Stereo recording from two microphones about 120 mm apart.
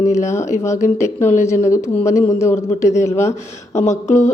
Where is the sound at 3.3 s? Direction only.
70° left (ahead or behind).